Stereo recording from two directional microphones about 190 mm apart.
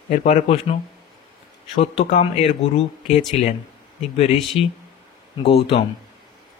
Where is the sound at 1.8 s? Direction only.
35° left (ahead or behind).